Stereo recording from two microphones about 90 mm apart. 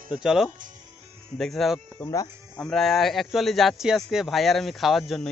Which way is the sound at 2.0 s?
40° left (ahead or behind).